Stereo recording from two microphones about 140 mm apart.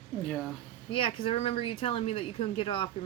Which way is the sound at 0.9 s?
40° left (ahead or behind).